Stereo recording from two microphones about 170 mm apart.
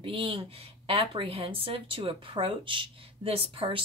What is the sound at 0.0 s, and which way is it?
Speech, 30° right (ahead or behind).